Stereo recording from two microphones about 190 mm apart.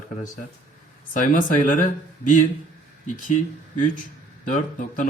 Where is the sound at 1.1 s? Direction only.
45° left (ahead or behind).